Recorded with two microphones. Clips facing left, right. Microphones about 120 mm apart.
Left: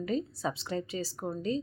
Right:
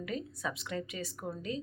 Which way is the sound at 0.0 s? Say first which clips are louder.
Left 6 dB; 30° left (ahead or behind).